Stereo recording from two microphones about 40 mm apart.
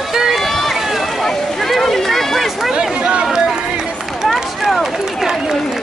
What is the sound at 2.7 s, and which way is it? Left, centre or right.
Chatter, centre.